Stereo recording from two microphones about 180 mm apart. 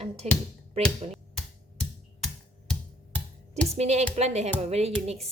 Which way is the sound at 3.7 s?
35° right (ahead or behind).